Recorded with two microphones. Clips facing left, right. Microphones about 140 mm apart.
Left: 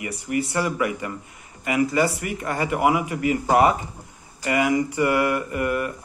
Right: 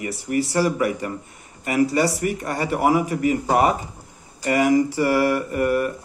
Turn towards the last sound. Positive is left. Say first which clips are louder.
# right 4 dB
turn(degrees=-35)  # may be behind; listen again after turning